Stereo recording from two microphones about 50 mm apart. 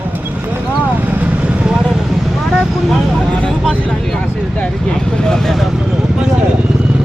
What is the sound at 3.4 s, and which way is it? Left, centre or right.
Speech, centre.